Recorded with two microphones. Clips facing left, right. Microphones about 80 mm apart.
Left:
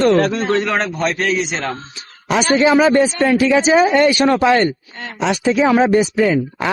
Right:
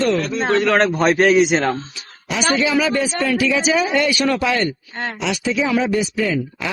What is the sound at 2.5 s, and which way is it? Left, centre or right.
Speech, left.